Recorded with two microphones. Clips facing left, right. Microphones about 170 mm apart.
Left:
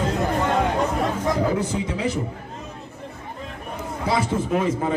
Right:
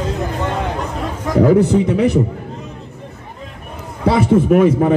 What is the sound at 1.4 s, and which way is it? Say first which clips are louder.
Speech: right 11 dB; 60° right (ahead or behind).